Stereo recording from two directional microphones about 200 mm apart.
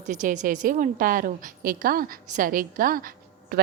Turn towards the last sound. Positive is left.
turn(degrees=-45)  # may be behind; listen again after turning